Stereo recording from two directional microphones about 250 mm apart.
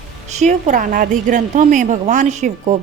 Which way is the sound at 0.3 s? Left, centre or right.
Right.